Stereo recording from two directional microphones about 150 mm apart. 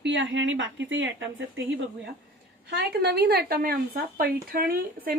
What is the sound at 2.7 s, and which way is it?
A woman's voice, 90° right.